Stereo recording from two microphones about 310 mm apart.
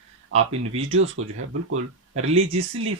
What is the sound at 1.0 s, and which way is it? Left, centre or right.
Speech, right.